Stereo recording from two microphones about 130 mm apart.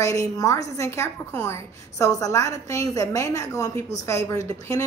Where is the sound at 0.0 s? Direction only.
25° left (ahead or behind).